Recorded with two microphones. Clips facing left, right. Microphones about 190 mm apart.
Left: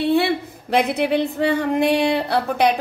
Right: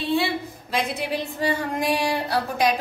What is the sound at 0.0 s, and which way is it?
A woman's voice, 60° left (ahead or behind).